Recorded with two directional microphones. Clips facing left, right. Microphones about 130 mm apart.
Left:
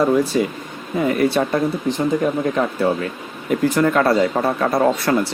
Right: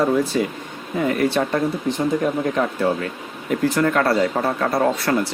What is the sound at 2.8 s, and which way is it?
Speech, 20° left (ahead or behind).